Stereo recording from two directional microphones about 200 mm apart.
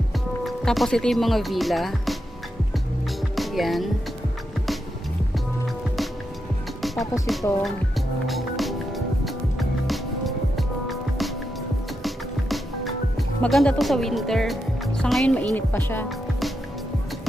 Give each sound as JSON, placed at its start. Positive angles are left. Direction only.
{"t": 0.4, "sound": "speech", "side_deg": 0}
{"t": 3.3, "sound": "speech", "side_deg": 0}
{"t": 6.8, "sound": "speech", "side_deg": 0}
{"t": 8.3, "sound": "music", "side_deg": 0}
{"t": 13.4, "sound": "speech", "side_deg": 5}